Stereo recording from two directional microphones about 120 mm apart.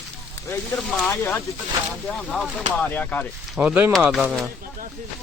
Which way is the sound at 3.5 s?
15° right (ahead or behind).